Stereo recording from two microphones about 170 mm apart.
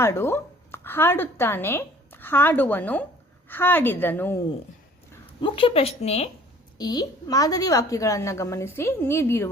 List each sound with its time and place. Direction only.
0.0 s a woman's voice: 15° left (ahead or behind)
5.4 s speech: 30° left (ahead or behind)
6.7 s a woman's voice: 25° left (ahead or behind)